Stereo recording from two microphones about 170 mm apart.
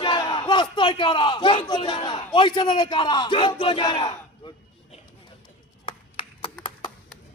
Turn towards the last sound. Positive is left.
turn(degrees=30)  # may be behind; listen again after turning